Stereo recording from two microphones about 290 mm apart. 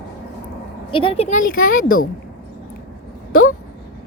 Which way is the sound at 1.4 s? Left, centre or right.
Left.